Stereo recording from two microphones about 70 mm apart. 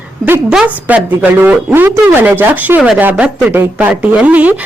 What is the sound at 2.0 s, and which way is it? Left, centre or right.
A woman's voice, right.